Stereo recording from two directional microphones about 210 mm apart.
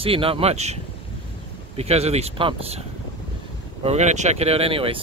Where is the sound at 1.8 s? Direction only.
30° right (ahead or behind).